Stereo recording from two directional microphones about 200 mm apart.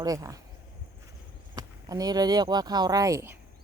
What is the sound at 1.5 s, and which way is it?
Speech, 20° right (ahead or behind).